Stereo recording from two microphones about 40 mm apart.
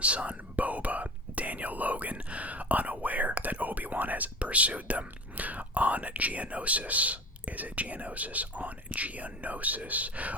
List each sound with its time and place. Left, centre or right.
0.0 s whispering: right
4.4 s speech: right